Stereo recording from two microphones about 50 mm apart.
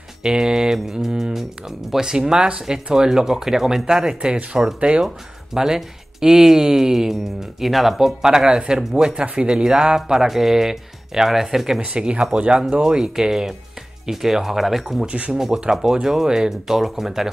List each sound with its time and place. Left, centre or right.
0.2 s speech: centre
5.0 s speech: centre
11.8 s speech: right; by 15.0 s centre
15.0 s speech: right
15.3 s speech: centre